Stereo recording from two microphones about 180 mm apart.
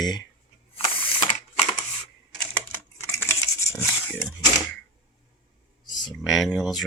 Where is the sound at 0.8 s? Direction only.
30° left (ahead or behind).